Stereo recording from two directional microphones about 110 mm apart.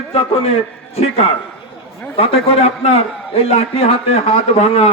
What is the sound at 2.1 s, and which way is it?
A man's voice, 60° left (ahead or behind).